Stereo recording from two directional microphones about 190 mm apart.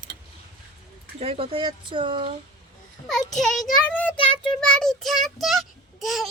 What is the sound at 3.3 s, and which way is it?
A child's voice, centre (ahead or behind).